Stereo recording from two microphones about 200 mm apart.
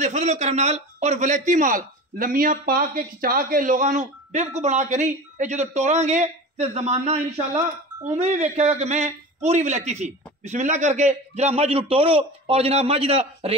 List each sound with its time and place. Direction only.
0.0 s a man's voice: 35° right (ahead or behind)